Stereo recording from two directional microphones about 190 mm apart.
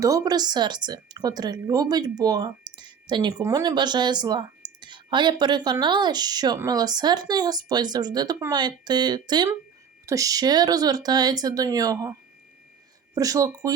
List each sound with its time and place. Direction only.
0.0 s speech: 15° right (ahead or behind)
13.1 s speech: 20° right (ahead or behind)